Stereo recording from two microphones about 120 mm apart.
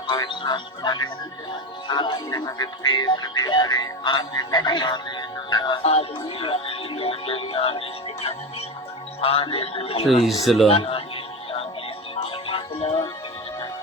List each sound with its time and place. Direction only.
0.1 s music: 35° left (ahead or behind)
5.8 s music: 55° left (ahead or behind)
9.2 s a man's voice: 50° left (ahead or behind)
10.2 s speech: centre (ahead or behind)
10.7 s a man's voice: 50° left (ahead or behind)
12.1 s music: 55° left (ahead or behind)